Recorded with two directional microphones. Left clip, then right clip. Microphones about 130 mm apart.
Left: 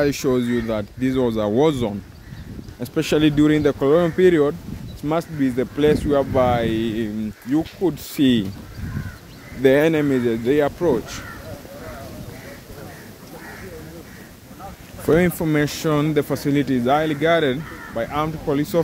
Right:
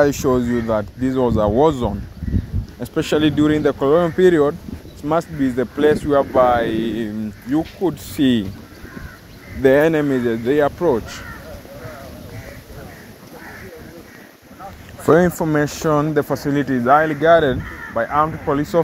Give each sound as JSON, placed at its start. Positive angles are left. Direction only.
{"t": 0.0, "sound": "speech", "side_deg": -10}
{"t": 5.0, "sound": "speech", "side_deg": -5}
{"t": 9.6, "sound": "speech", "side_deg": -5}
{"t": 15.4, "sound": "speech", "side_deg": 0}
{"t": 16.3, "sound": "speech", "side_deg": 25}
{"t": 17.2, "sound": "speech", "side_deg": 0}